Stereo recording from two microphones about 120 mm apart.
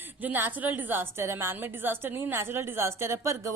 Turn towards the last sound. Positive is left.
turn(degrees=-25)  # may be behind; listen again after turning